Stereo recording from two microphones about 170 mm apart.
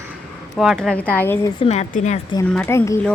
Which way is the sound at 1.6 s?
40° left (ahead or behind).